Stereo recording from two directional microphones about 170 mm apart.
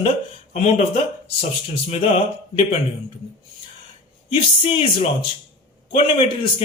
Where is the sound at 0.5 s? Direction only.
40° left (ahead or behind).